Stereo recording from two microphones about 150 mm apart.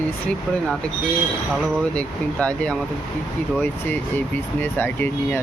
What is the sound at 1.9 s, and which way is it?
Speech, 5° left (ahead or behind).